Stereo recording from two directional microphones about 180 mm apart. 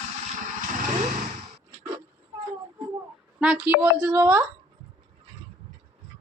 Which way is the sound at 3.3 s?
5° right (ahead or behind).